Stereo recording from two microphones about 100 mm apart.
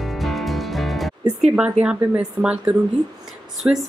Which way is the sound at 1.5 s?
10° right (ahead or behind).